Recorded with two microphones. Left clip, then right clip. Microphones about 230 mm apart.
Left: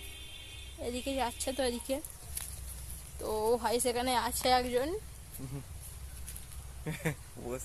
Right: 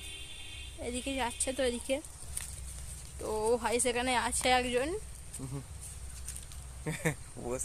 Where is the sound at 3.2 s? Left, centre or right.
Centre.